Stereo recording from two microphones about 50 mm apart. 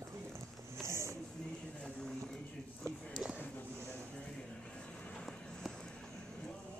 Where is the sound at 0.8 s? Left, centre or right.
Right.